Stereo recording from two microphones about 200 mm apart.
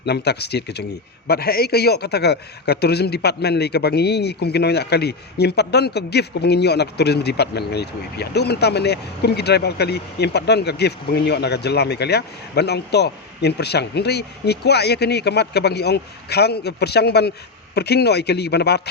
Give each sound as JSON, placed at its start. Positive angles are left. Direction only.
{"t": 0.0, "sound": "a man's voice", "side_deg": 55}